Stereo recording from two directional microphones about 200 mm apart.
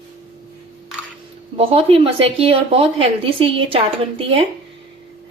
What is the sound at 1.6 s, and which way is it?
Speech, 30° right (ahead or behind).